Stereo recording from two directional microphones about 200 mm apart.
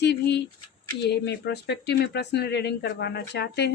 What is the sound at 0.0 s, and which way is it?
A woman's voice, 55° left (ahead or behind).